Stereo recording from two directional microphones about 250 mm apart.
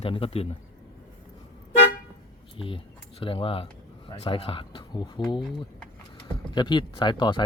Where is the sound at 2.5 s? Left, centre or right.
Left.